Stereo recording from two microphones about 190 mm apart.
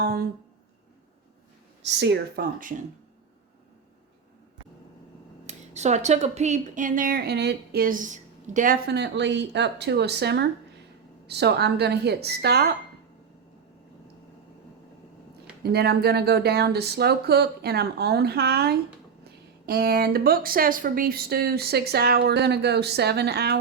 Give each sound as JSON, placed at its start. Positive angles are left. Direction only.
{"t": 0.0, "sound": "speech", "side_deg": -50}
{"t": 1.8, "sound": "speech", "side_deg": -65}
{"t": 5.5, "sound": "speech", "side_deg": -35}
{"t": 15.6, "sound": "speech", "side_deg": -60}